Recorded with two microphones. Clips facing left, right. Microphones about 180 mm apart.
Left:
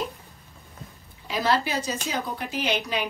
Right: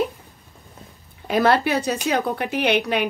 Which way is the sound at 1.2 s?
55° right (ahead or behind).